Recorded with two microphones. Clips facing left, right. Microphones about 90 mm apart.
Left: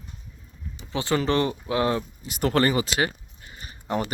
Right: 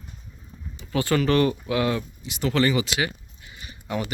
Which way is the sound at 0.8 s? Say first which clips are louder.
Right 2 dB; 25° left (ahead or behind).